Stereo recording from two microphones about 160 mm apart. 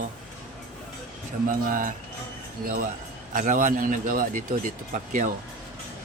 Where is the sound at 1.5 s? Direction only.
60° right (ahead or behind).